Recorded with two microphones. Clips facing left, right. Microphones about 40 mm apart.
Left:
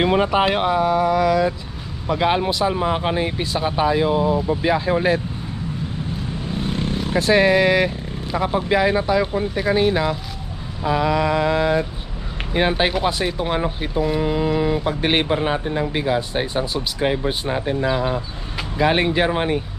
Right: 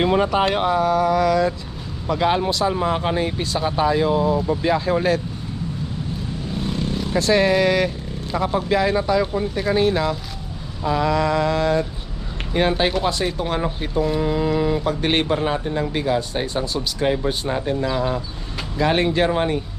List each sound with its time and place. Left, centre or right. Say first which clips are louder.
0.0 s speech: left 1 dB; centre
6.6 s vehicle: left 1 dB; left
6.9 s speech: left 1 dB; left